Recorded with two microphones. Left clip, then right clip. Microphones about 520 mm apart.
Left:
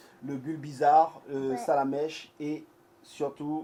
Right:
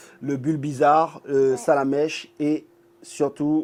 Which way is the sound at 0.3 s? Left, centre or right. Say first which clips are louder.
Right 11 dB; right.